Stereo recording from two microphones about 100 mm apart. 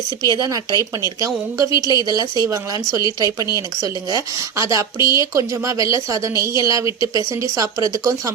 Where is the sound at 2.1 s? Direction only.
40° right (ahead or behind).